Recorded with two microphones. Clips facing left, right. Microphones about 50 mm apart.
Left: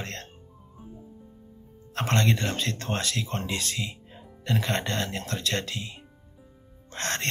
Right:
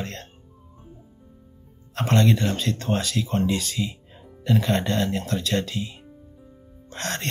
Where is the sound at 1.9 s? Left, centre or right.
Left.